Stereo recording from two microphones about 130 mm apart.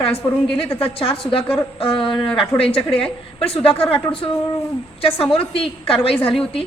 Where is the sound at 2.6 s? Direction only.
45° left (ahead or behind).